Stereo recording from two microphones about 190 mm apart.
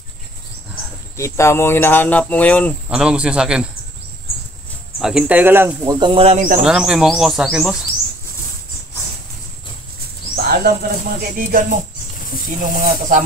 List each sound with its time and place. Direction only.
1.1 s speech: 15° left (ahead or behind)
2.9 s speech: 5° right (ahead or behind)
5.0 s speech: 5° right (ahead or behind)
5.9 s speech: 25° right (ahead or behind)
6.6 s speech: 5° right (ahead or behind)
10.3 s speech: 55° right (ahead or behind)